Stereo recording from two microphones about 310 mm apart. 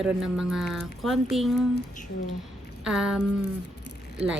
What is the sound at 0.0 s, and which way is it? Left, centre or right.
Speech, centre.